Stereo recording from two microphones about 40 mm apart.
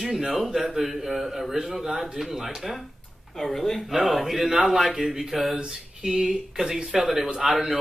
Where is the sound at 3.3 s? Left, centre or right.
Centre.